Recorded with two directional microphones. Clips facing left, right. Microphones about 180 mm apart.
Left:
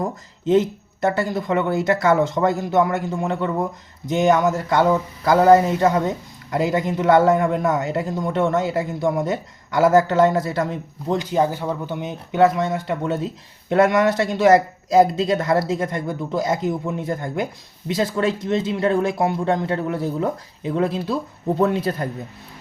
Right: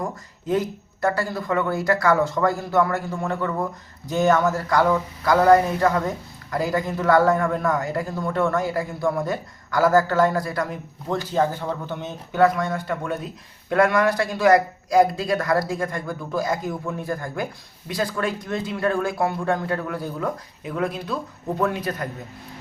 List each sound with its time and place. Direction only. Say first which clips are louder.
0.0 s speech: left 5 dB; 25° left (ahead or behind)